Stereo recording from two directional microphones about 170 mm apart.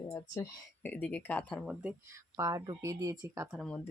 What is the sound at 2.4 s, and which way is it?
Speech, 20° right (ahead or behind).